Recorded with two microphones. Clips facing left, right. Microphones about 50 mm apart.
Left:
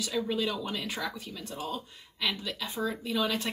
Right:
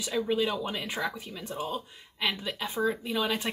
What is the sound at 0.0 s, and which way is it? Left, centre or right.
A woman's voice, centre.